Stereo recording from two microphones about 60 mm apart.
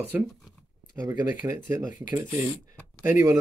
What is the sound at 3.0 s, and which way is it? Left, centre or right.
Speech, right.